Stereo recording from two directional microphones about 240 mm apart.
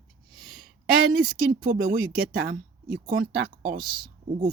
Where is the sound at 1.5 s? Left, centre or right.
Right.